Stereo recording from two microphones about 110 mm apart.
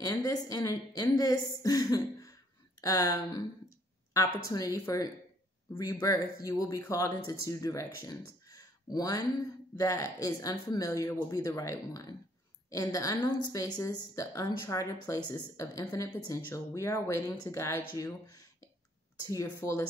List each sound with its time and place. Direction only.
0.0 s speech: 35° left (ahead or behind)
15.8 s speech: 20° left (ahead or behind)